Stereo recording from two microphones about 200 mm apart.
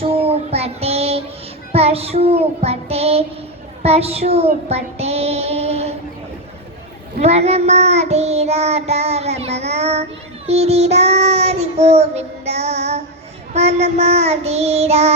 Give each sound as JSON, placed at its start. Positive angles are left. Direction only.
{"t": 0.0, "sound": "child singing", "side_deg": -30}
{"t": 7.2, "sound": "child singing", "side_deg": -30}